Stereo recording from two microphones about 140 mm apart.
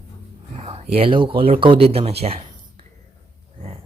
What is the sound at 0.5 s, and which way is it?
Speech, 50° right (ahead or behind).